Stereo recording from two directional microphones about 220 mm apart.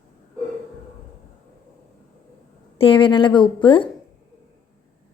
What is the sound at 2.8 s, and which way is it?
Speech, 25° left (ahead or behind).